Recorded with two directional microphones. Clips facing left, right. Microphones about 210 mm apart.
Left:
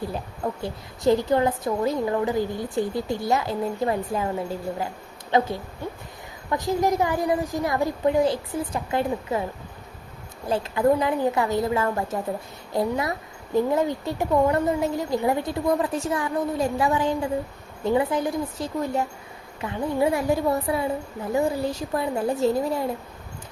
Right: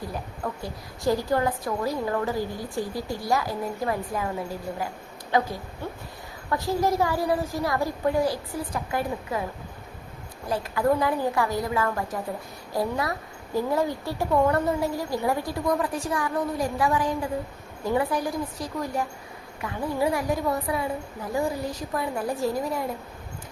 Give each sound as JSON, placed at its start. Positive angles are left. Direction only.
{"t": 0.1, "sound": "a woman's voice", "side_deg": 25}
{"t": 5.3, "sound": "a woman's voice", "side_deg": 25}
{"t": 6.5, "sound": "a woman's voice", "side_deg": 20}
{"t": 10.5, "sound": "a woman's voice", "side_deg": 25}